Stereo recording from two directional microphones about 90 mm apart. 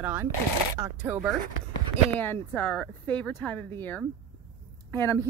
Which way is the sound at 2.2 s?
25° left (ahead or behind).